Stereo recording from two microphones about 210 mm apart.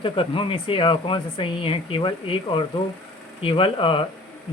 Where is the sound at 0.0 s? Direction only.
25° left (ahead or behind).